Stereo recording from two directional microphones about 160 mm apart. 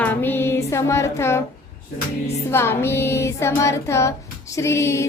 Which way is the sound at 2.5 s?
15° left (ahead or behind).